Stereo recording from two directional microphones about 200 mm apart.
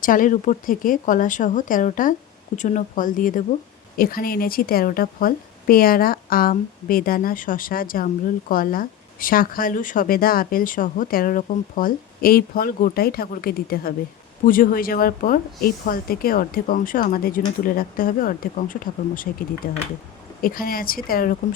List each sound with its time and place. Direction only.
0.0 s a woman's voice: 40° left (ahead or behind)